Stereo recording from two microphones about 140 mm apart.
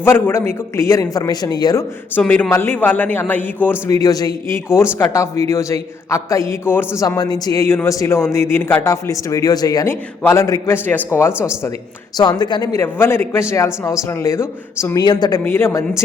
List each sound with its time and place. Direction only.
0.0 s a man's voice: 15° left (ahead or behind)
2.1 s a man's voice: 10° left (ahead or behind)
12.1 s a man's voice: 30° left (ahead or behind)
15.0 s a man's voice: 30° left (ahead or behind)
15.4 s a man's voice: 15° left (ahead or behind)